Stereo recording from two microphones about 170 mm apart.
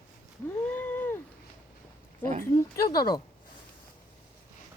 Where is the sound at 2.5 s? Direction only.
20° left (ahead or behind).